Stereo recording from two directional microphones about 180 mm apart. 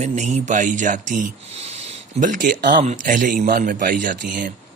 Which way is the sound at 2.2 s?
45° right (ahead or behind).